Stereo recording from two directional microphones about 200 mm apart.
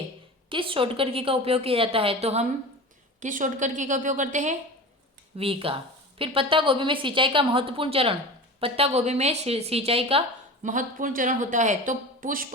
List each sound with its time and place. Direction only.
0.5 s a woman's voice: 25° right (ahead or behind)
5.4 s a woman's voice: 25° right (ahead or behind); by 12.5 s 40° right (ahead or behind)